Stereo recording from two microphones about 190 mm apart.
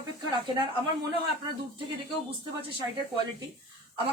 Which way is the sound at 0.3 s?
20° right (ahead or behind).